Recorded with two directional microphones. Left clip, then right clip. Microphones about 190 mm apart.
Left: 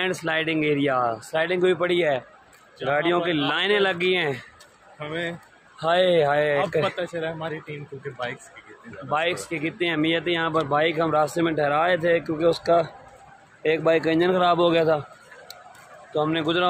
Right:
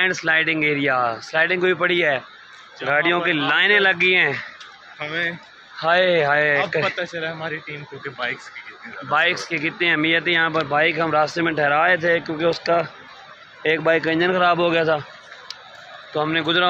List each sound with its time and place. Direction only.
0.0 s speech: 5° left (ahead or behind)
4.9 s speech: 20° left (ahead or behind)
5.8 s speech: centre (ahead or behind)
7.0 s speech: 20° left (ahead or behind)
9.1 s speech: 5° left (ahead or behind)
16.2 s speech: 5° left (ahead or behind)